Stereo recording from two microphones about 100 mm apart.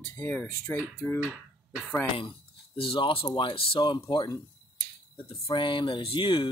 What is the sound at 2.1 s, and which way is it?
Speech, 60° left (ahead or behind).